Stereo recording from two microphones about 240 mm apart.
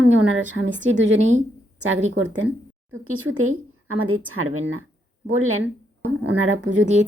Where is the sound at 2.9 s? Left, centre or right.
Right.